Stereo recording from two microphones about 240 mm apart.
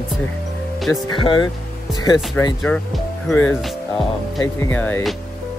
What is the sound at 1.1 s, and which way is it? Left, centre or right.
Speech, centre.